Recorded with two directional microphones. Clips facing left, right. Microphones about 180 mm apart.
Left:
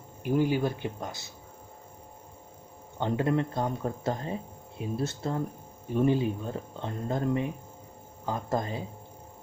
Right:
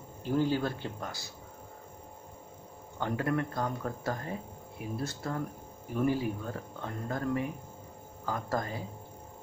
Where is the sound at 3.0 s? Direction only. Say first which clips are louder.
Left 4 dB; 20° left (ahead or behind).